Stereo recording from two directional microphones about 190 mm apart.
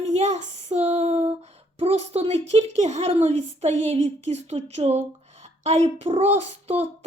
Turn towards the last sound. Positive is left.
turn(degrees=-35)  # may be behind; listen again after turning